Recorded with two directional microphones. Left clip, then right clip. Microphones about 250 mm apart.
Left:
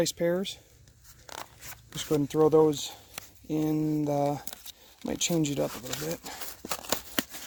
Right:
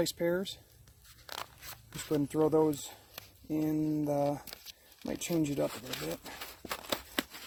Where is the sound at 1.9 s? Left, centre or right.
Left.